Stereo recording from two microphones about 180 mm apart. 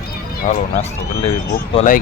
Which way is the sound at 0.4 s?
40° left (ahead or behind).